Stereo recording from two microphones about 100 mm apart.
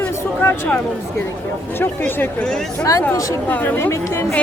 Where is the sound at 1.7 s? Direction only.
20° left (ahead or behind).